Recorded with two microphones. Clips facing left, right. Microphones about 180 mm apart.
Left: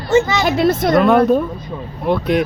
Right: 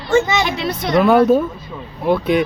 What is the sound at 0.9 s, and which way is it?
Speech, centre (ahead or behind).